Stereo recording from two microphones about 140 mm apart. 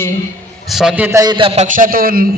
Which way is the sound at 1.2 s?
35° right (ahead or behind).